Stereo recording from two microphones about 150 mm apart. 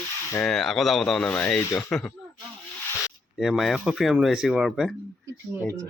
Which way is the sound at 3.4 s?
Centre (ahead or behind).